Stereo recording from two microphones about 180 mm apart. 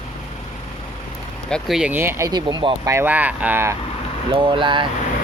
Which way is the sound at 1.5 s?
Centre (ahead or behind).